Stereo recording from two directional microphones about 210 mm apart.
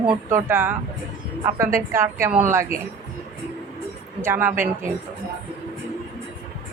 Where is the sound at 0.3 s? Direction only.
10° right (ahead or behind).